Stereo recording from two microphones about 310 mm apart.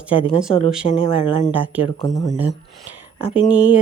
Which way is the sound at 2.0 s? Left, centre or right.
Centre.